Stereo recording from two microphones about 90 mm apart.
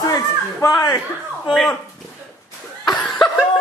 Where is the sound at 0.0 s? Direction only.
40° left (ahead or behind).